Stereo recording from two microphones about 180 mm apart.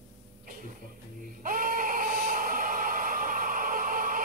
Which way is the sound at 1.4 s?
50° right (ahead or behind).